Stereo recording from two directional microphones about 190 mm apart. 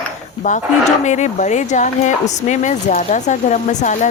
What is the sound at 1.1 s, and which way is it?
Speech, 40° left (ahead or behind).